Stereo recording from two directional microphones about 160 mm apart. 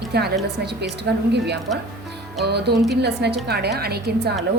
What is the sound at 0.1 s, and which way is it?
A woman's voice, 90° right.